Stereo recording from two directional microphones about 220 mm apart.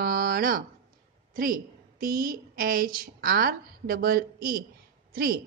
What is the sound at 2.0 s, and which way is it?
A woman's voice, 40° right (ahead or behind).